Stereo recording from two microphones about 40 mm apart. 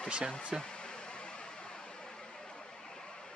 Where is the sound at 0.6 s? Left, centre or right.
Left.